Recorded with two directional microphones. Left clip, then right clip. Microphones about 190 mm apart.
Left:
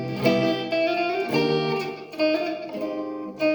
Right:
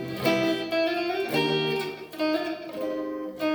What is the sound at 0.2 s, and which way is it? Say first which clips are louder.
Music: left 3 dB; 10° left (ahead or behind).